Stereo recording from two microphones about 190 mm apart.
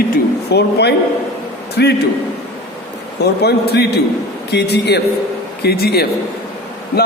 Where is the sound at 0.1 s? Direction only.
60° left (ahead or behind).